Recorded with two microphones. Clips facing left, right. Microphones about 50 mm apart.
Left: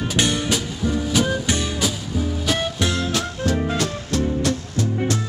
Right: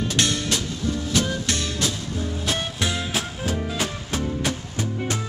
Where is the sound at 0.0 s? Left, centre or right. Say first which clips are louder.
Left 2 dB; centre.